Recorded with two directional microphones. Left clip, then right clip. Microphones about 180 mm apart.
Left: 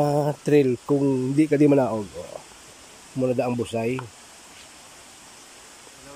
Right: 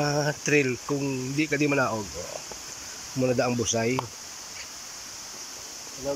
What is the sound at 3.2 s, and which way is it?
Speech, 15° left (ahead or behind).